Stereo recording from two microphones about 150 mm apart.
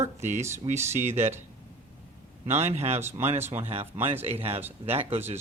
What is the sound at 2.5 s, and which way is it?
Speech, 45° right (ahead or behind).